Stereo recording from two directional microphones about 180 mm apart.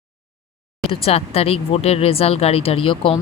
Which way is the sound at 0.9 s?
35° left (ahead or behind).